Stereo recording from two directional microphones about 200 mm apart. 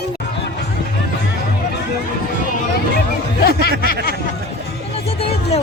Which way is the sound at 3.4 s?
50° left (ahead or behind).